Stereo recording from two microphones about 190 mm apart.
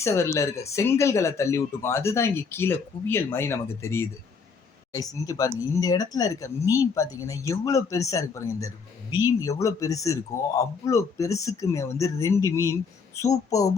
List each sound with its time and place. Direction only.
0.0 s speech: 15° left (ahead or behind)